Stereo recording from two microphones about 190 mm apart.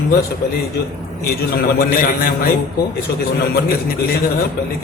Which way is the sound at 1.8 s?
50° left (ahead or behind).